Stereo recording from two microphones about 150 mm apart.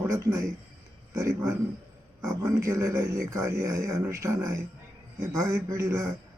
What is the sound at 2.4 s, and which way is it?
Speech, 20° right (ahead or behind).